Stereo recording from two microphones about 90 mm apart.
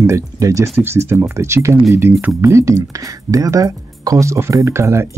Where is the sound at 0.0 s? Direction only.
35° right (ahead or behind).